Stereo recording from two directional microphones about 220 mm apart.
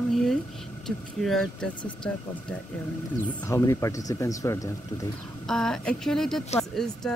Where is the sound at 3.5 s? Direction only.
15° left (ahead or behind).